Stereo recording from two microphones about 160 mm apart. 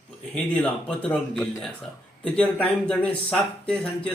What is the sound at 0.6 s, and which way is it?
Speech, 5° left (ahead or behind).